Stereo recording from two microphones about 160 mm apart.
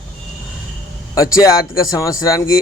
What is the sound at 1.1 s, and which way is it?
Speech, 20° left (ahead or behind).